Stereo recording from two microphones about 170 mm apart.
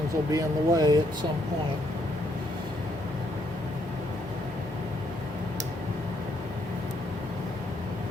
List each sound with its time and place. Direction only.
0.3 s speech: 20° right (ahead or behind)